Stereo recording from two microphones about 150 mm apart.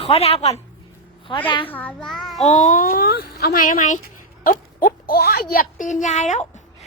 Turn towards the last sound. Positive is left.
turn(degrees=50)  # may be behind; listen again after turning